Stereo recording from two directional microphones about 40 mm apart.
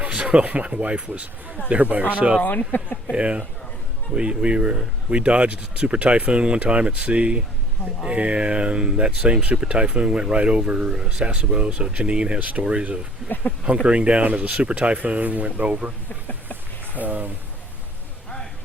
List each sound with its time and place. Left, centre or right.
0.0 s speech: right
2.4 s speech: left
3.2 s speech: right
12.4 s speech: right
12.8 s speech: right
13.2 s speech: left
13.8 s speech: right
16.0 s a sound: left
17.0 s speech: right